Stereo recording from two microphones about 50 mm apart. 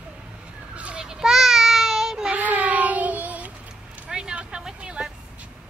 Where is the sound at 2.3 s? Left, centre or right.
Right.